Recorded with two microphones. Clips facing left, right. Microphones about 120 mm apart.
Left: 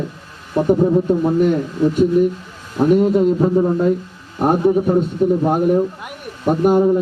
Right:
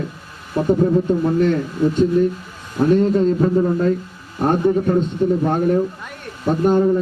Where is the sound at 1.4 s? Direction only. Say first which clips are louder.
Left 1 dB; 10° left (ahead or behind).